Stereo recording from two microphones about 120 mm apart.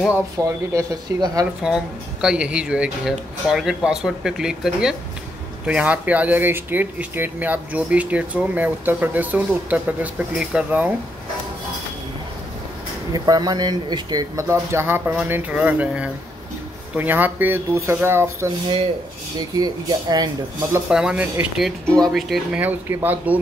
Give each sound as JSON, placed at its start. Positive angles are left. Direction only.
{"t": 0.4, "sound": "speech", "side_deg": -25}
{"t": 2.2, "sound": "speech", "side_deg": -10}
{"t": 13.1, "sound": "speech", "side_deg": -30}
{"t": 19.5, "sound": "speech", "side_deg": -35}
{"t": 20.9, "sound": "speech", "side_deg": -10}
{"t": 21.6, "sound": "speech", "side_deg": 10}
{"t": 22.6, "sound": "speech", "side_deg": -15}